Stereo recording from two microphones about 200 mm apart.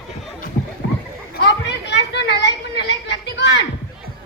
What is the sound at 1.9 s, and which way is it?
Children playing, 60° left (ahead or behind).